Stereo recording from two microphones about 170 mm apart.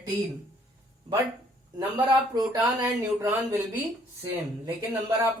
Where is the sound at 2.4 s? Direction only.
25° right (ahead or behind).